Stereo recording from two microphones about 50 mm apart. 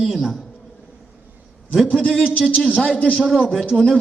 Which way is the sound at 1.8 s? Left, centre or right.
Centre.